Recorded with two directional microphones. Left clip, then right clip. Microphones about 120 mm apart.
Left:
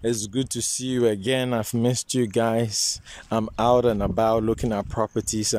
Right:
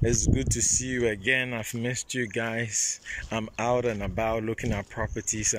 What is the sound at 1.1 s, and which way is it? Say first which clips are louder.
Speech: left 2 dB; 40° left (ahead or behind).